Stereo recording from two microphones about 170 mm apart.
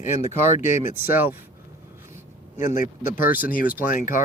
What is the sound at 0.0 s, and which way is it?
Speech, 45° left (ahead or behind).